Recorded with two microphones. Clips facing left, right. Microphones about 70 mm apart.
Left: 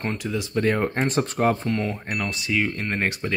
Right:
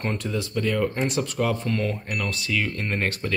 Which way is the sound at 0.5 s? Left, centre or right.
Left.